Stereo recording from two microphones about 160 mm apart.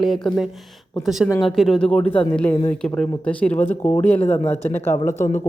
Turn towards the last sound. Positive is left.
turn(degrees=15)  # may be behind; listen again after turning